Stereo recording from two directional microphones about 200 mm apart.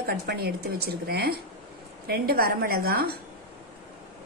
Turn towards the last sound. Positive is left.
turn(degrees=-50)  # may be behind; listen again after turning